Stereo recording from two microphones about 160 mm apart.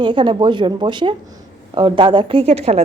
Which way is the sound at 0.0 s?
30° right (ahead or behind).